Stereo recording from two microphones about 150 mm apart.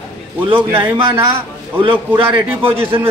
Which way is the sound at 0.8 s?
30° right (ahead or behind).